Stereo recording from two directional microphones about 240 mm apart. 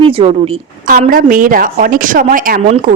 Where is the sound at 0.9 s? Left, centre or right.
Right.